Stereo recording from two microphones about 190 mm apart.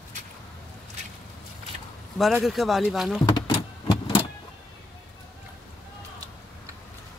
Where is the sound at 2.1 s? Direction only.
Centre (ahead or behind).